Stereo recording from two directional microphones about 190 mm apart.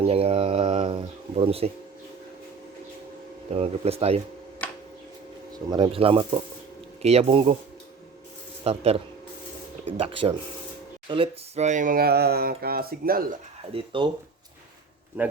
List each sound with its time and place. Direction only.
0.0 s a sound: 30° right (ahead or behind)
3.5 s speech: 30° right (ahead or behind)
5.7 s speech: 25° right (ahead or behind)
8.6 s speech: 35° right (ahead or behind)
10.0 s speech: 30° right (ahead or behind); by 13.2 s 50° right (ahead or behind)
13.7 s speech: 25° right (ahead or behind)
15.2 s speech: 10° right (ahead or behind)